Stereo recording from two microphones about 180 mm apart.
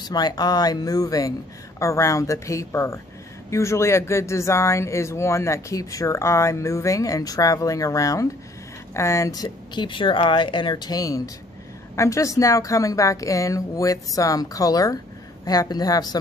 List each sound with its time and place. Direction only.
0.0 s speech: 20° left (ahead or behind)